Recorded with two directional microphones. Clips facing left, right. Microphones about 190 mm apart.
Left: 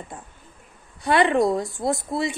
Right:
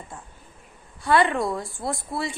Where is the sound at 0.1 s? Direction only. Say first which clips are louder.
Left 2 dB; 20° left (ahead or behind).